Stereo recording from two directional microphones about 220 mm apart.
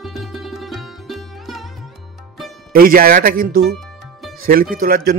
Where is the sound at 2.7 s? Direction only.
40° right (ahead or behind).